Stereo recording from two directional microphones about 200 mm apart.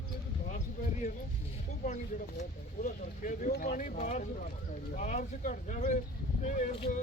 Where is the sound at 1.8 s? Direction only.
35° left (ahead or behind).